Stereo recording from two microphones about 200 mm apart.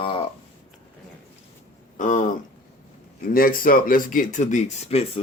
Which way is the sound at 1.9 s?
40° left (ahead or behind).